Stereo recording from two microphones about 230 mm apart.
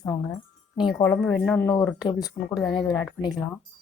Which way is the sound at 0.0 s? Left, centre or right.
Centre.